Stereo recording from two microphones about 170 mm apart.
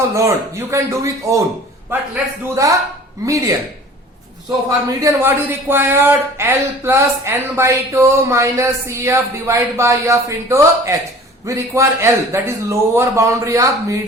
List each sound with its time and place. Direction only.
0.1 s a man's voice: 15° right (ahead or behind)
2.6 s a man's voice: 20° right (ahead or behind)